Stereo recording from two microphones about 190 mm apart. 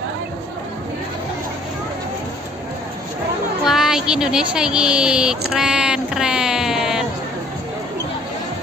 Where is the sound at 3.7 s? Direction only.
5° right (ahead or behind).